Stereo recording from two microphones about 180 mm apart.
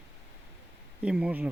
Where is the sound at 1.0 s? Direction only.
5° right (ahead or behind).